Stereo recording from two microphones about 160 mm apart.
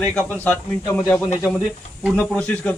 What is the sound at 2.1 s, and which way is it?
Speech, 10° left (ahead or behind).